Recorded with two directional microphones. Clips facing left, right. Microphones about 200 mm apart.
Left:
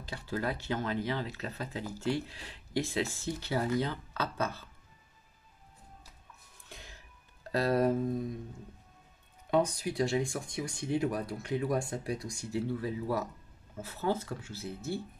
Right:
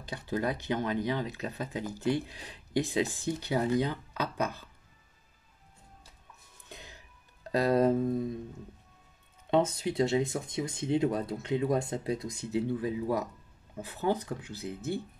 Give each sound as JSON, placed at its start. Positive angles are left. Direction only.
{"t": 0.0, "sound": "speech", "side_deg": -20}
{"t": 6.7, "sound": "music", "side_deg": -20}
{"t": 7.5, "sound": "speech", "side_deg": -20}
{"t": 9.5, "sound": "speech", "side_deg": -25}